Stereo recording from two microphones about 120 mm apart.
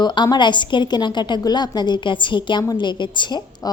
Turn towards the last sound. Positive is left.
turn(degrees=40)  # may be behind; listen again after turning